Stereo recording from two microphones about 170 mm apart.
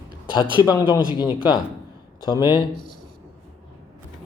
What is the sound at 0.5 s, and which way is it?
A man's voice, 25° left (ahead or behind).